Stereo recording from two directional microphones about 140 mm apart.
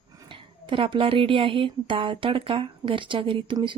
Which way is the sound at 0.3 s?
40° right (ahead or behind).